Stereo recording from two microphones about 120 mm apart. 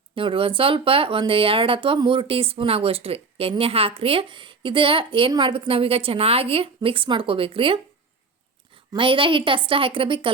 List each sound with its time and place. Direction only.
0.1 s a woman's voice: 45° right (ahead or behind)
8.9 s a woman's voice: 45° right (ahead or behind)